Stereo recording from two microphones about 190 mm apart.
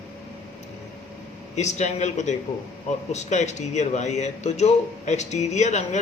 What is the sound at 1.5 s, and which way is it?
Speech, 35° left (ahead or behind).